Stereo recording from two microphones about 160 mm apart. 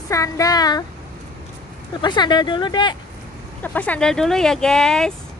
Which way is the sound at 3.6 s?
10° left (ahead or behind).